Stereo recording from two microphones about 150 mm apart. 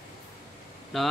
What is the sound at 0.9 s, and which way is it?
Speech, centre (ahead or behind).